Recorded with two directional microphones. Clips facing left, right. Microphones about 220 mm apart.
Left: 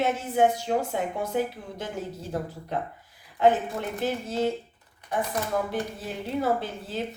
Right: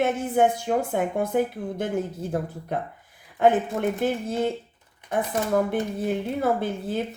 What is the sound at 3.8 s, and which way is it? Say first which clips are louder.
Speech: right 7 dB; 50° right (ahead or behind).